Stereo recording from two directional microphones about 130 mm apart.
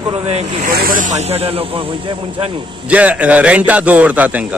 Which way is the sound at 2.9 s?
10° right (ahead or behind).